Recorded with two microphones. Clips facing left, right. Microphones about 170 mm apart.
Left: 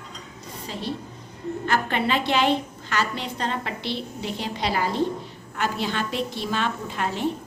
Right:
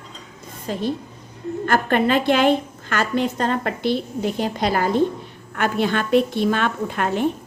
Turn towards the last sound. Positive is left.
turn(degrees=-55)  # may be behind; listen again after turning